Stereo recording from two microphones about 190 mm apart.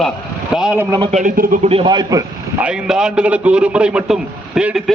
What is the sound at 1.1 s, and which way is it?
Speech, 45° right (ahead or behind).